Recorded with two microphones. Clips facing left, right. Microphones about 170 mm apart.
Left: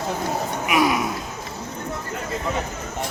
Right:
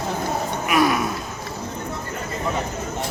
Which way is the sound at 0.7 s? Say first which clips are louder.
Right 1 dB; 10° left (ahead or behind).